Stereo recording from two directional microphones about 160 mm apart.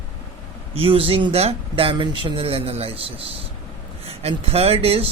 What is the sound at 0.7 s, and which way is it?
Speech, 35° right (ahead or behind).